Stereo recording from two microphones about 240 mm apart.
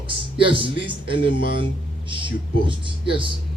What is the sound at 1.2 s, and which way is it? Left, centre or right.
Speech, left.